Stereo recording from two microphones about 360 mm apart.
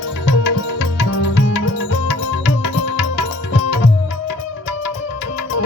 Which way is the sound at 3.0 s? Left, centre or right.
Left.